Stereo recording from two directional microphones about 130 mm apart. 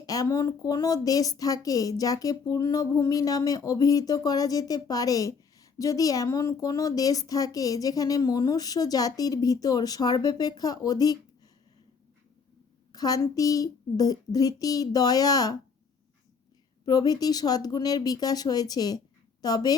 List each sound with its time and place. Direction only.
0.0 s speech: 30° left (ahead or behind)
12.9 s speech: 30° left (ahead or behind)
16.8 s speech: 30° left (ahead or behind)